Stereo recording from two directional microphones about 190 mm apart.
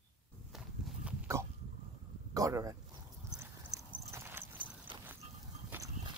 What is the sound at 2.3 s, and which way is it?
Speech, 15° right (ahead or behind).